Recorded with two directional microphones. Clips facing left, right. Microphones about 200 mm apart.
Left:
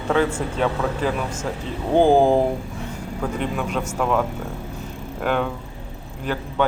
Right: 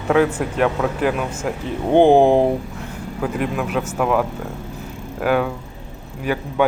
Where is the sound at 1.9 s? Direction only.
25° right (ahead or behind).